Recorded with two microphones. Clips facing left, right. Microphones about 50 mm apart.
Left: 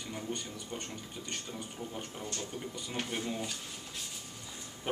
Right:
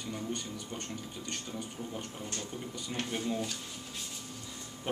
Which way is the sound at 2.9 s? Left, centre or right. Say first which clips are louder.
Right 2 dB; centre.